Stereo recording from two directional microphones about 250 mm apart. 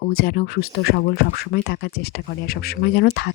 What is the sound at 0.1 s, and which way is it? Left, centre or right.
Speech, left.